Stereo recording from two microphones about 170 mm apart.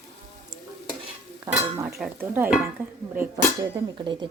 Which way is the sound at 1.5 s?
10° right (ahead or behind).